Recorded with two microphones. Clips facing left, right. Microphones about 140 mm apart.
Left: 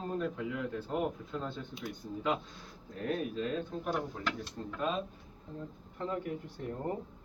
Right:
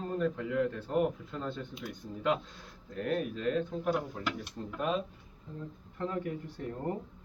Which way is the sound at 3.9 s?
10° right (ahead or behind).